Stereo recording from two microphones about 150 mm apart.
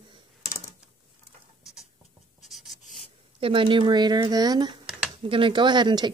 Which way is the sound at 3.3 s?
35° right (ahead or behind).